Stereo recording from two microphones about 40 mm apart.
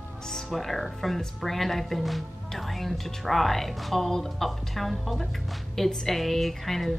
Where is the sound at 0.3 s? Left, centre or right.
Centre.